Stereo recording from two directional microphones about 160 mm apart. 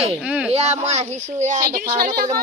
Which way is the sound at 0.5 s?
45° right (ahead or behind).